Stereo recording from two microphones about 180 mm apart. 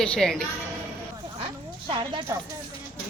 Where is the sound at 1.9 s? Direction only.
20° right (ahead or behind).